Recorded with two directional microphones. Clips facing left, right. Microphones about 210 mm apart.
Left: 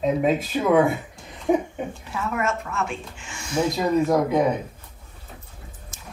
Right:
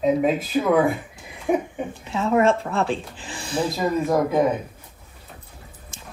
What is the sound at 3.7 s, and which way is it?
Speech, centre (ahead or behind).